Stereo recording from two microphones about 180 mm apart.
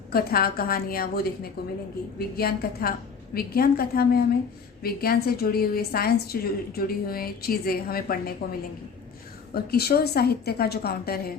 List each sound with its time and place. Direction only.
0.1 s a woman's voice: 60° left (ahead or behind)
9.6 s a woman's voice: 60° left (ahead or behind)